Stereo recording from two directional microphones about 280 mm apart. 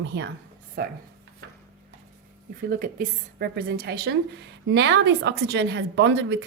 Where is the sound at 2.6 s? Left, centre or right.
Right.